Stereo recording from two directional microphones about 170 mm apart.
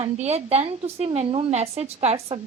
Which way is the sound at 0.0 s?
40° right (ahead or behind).